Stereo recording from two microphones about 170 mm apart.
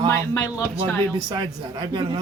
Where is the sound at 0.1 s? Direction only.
20° left (ahead or behind).